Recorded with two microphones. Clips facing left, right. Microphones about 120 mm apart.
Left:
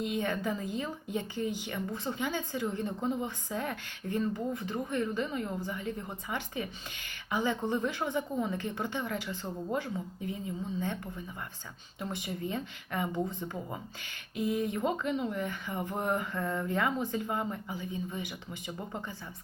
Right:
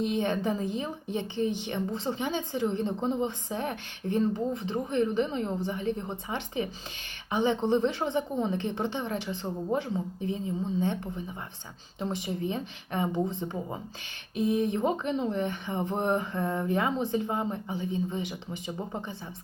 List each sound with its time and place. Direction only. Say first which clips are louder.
0.0 s a woman's voice: right 4 dB; 25° right (ahead or behind)